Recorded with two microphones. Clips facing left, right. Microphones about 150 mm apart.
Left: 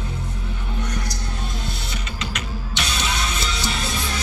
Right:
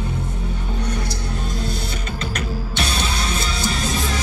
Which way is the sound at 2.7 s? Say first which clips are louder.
Right 1 dB; 35° right (ahead or behind).